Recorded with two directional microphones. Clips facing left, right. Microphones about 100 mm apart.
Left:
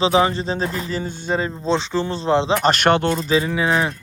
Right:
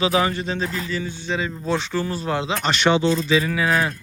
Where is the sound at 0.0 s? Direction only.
25° left (ahead or behind); by 1.5 s 45° left (ahead or behind).